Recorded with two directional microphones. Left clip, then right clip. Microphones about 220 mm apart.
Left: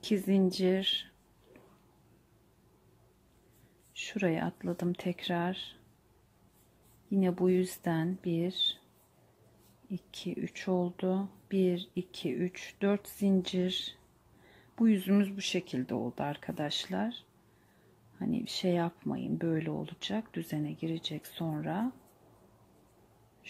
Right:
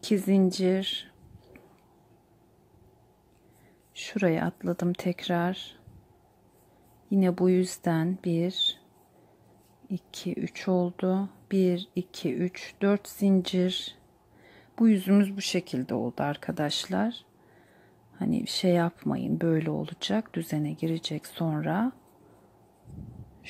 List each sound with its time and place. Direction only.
0.0 s speech: 15° right (ahead or behind)
3.9 s speech: 15° right (ahead or behind)
7.1 s speech: 15° right (ahead or behind)
9.8 s speech: 15° right (ahead or behind)